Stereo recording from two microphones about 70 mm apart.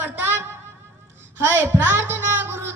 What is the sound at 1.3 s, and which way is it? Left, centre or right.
A woman's voice, right.